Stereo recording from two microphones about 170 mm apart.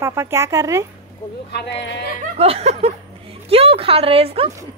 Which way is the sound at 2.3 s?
35° right (ahead or behind).